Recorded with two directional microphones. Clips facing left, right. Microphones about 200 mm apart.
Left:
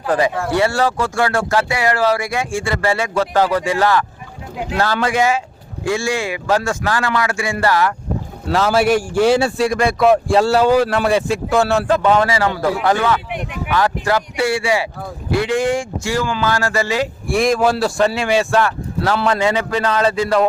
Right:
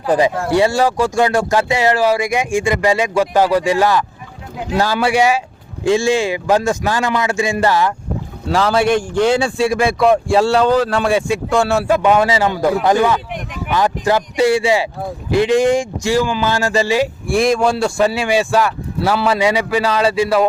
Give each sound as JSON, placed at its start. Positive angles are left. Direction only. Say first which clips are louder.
{"t": 0.0, "sound": "a man's voice", "louder": "right 2 dB", "side_deg": -15}
{"t": 8.4, "sound": "a man's voice", "louder": "even", "side_deg": 5}
{"t": 17.2, "sound": "speech", "louder": "left 1 dB", "side_deg": 0}